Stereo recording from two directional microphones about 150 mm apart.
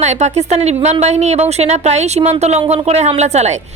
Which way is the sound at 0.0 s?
50° right (ahead or behind).